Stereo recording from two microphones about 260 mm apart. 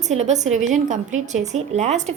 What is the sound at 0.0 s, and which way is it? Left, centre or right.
A woman's voice, right.